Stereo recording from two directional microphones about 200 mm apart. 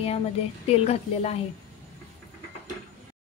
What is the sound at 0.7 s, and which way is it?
Speech, 30° left (ahead or behind).